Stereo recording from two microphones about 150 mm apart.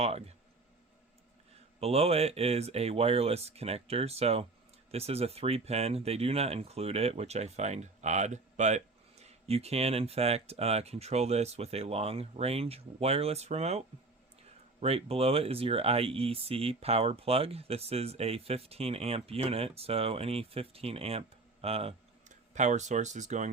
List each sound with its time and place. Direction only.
0.0 s speech: 45° right (ahead or behind)
1.8 s speech: 45° right (ahead or behind)
22.5 s speech: 50° right (ahead or behind)